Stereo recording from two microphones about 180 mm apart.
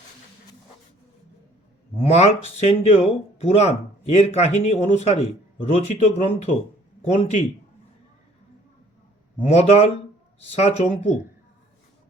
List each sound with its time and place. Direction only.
2.0 s speech: 35° left (ahead or behind)
9.4 s speech: 35° left (ahead or behind)